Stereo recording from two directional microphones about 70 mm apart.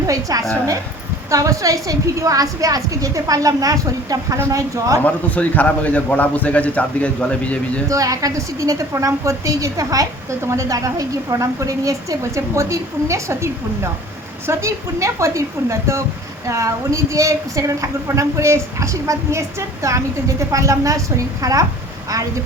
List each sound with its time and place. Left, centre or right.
0.1 s a woman's voice: right
5.0 s a man's voice: left
7.9 s a woman's voice: right
10.4 s a woman's voice: right